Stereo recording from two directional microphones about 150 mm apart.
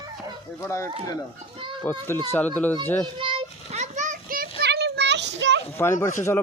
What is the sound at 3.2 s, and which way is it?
Children playing, 35° right (ahead or behind).